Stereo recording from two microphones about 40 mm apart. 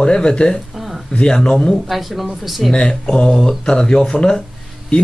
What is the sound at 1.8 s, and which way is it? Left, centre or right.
Speech, centre.